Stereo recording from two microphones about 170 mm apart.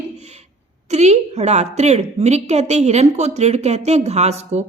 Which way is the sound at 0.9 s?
40° right (ahead or behind).